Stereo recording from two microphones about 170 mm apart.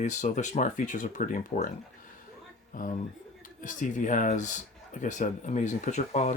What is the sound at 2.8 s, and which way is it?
Speech, 50° left (ahead or behind).